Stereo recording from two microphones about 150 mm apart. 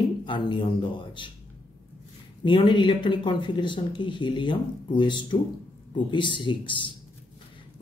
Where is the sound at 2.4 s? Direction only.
30° left (ahead or behind).